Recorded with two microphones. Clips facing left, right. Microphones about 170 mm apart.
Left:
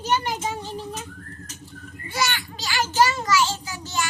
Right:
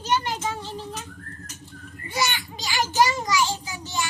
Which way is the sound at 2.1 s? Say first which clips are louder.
Even; 15° right (ahead or behind).